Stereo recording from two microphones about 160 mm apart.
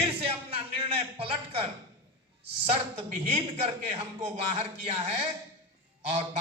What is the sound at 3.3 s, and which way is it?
A man's voice, 35° right (ahead or behind).